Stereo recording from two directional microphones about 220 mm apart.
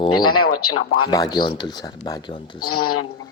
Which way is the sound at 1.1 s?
20° left (ahead or behind).